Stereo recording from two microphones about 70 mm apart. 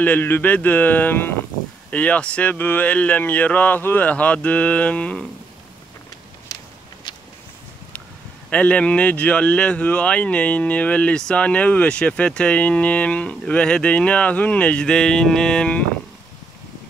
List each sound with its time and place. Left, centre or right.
0.0 s speech: left
8.5 s speech: left